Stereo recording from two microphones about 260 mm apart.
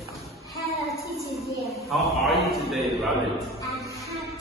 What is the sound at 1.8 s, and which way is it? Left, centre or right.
A man's voice, centre.